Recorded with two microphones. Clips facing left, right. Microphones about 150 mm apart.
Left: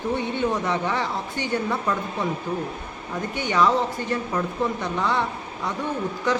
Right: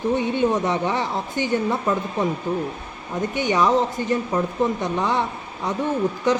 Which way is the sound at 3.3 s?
20° right (ahead or behind).